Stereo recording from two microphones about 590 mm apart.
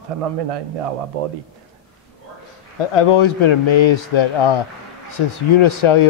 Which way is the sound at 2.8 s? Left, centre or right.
Left.